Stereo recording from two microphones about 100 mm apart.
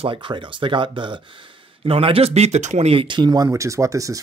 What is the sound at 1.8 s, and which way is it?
Speech, 70° right (ahead or behind).